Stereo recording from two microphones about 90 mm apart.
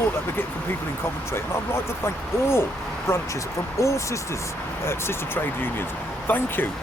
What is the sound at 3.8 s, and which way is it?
Speech, 35° left (ahead or behind).